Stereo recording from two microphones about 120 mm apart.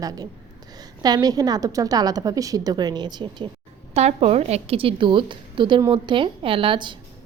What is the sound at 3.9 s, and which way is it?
A woman's voice, 60° right (ahead or behind).